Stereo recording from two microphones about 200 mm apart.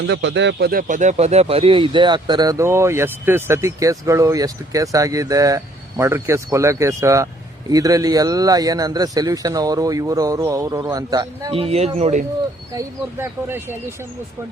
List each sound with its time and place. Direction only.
0.1 s a man's voice: 65° right (ahead or behind); by 12.2 s 35° right (ahead or behind)
12.7 s speech: 15° right (ahead or behind)